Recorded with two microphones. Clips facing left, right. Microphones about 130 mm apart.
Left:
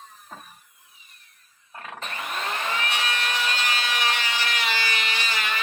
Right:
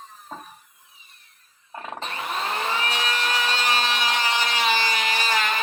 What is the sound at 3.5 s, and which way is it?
Wood, 30° right (ahead or behind).